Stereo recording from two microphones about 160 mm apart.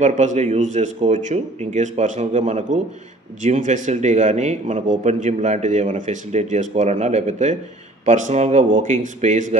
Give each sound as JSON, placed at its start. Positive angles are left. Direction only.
{"t": 0.0, "sound": "a man's voice", "side_deg": -50}